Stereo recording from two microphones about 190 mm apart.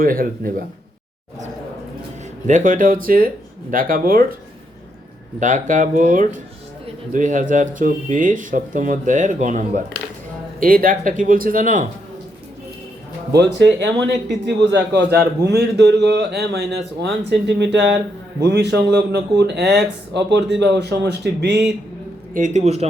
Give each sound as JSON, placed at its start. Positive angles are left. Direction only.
{"t": 0.0, "sound": "speech", "side_deg": -50}
{"t": 2.5, "sound": "speech", "side_deg": -40}
{"t": 5.4, "sound": "speech", "side_deg": -40}
{"t": 13.6, "sound": "speech", "side_deg": -70}
{"t": 22.4, "sound": "speech", "side_deg": -40}